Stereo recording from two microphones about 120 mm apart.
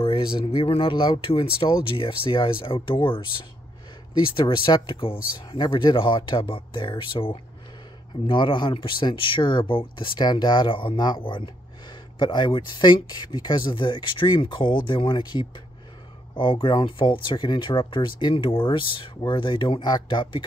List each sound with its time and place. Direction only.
0.0 s a sound: 50° left (ahead or behind)
0.5 s speech: 50° left (ahead or behind)
4.4 s speech: 40° left (ahead or behind)